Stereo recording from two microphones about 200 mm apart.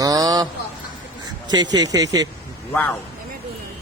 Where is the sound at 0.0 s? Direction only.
20° right (ahead or behind).